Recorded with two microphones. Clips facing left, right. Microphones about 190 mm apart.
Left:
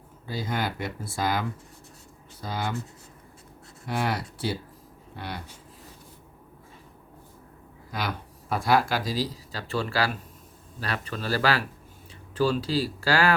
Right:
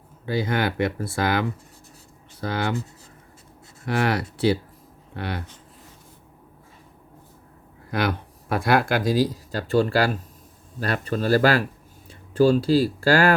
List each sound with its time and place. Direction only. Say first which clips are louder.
0.3 s speech: right 6 dB; 70° right (ahead or behind)
3.8 s speech: right 5 dB; 70° right (ahead or behind)
7.9 s speech: right 7 dB; 65° right (ahead or behind); by 13.3 s 45° right (ahead or behind)